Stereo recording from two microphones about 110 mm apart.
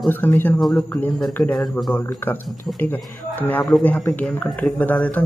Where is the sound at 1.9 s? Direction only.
20° left (ahead or behind).